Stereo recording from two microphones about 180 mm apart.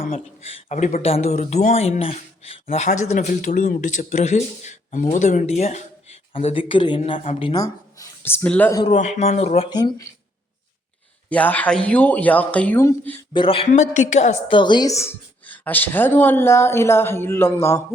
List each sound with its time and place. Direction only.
0.4 s speech: 40° left (ahead or behind); by 8.7 s 10° left (ahead or behind)
8.9 s speech: 40° left (ahead or behind)
9.6 s speech: 25° left (ahead or behind)
11.3 s a woman's voice: 10° left (ahead or behind)
13.4 s a woman's voice: 30° left (ahead or behind); by 17.8 s 15° left (ahead or behind)